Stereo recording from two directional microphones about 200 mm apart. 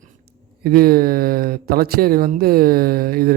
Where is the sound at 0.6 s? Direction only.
50° right (ahead or behind).